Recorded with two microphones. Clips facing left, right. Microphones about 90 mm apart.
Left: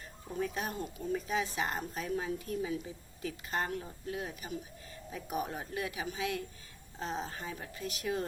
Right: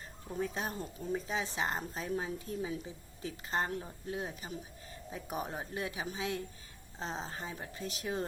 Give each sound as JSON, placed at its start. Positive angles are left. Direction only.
{"t": 0.3, "sound": "a woman's voice", "side_deg": -30}